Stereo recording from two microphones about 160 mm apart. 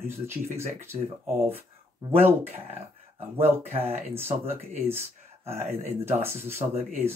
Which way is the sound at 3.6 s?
40° right (ahead or behind).